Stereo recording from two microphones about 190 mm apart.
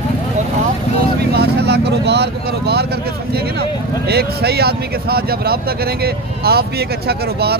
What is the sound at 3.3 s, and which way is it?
Speech, 55° right (ahead or behind).